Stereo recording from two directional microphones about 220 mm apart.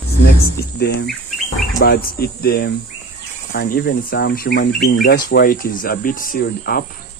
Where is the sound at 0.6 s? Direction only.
45° left (ahead or behind).